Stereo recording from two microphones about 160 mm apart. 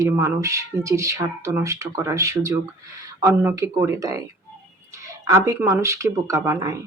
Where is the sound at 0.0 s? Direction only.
20° right (ahead or behind).